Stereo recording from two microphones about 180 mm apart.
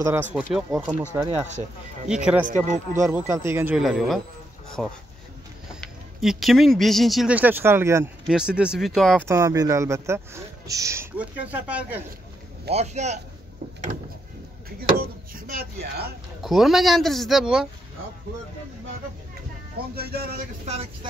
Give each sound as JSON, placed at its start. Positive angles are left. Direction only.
{"t": 0.0, "sound": "speech", "side_deg": -10}
{"t": 9.3, "sound": "speech", "side_deg": -15}
{"t": 12.7, "sound": "speech", "side_deg": -40}
{"t": 15.0, "sound": "chopping", "side_deg": -55}
{"t": 16.4, "sound": "speech", "side_deg": 0}
{"t": 20.0, "sound": "chopping", "side_deg": -60}
{"t": 20.6, "sound": "speech", "side_deg": -35}